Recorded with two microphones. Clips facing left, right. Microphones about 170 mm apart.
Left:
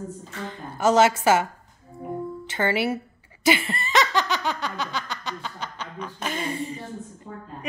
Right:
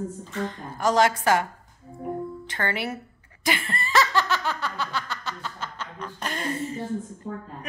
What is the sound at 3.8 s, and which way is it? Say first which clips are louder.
Snicker: even; 20° left (ahead or behind).